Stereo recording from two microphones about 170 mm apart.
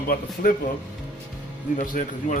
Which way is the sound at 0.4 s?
55° left (ahead or behind).